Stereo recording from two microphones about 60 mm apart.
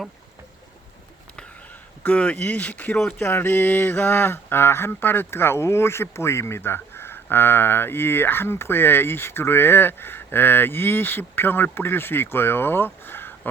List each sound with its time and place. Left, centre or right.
2.0 s speech: left
3.2 s speech: left